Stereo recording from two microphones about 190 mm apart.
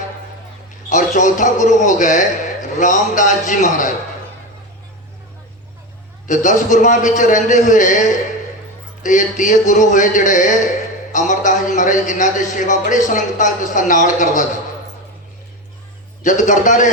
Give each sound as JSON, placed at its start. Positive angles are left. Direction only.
{"t": 0.9, "sound": "a man's voice", "side_deg": 40}
{"t": 6.2, "sound": "a man's voice", "side_deg": 40}
{"t": 16.2, "sound": "a man's voice", "side_deg": 40}